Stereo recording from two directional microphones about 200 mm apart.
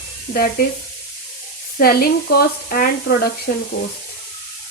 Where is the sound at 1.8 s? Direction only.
50° left (ahead or behind).